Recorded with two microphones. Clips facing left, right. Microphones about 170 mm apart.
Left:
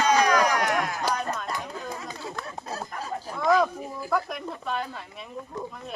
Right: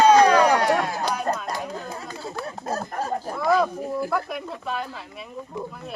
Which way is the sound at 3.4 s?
5° right (ahead or behind).